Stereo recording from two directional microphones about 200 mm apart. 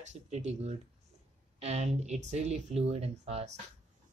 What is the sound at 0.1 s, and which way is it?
Speech, 35° right (ahead or behind).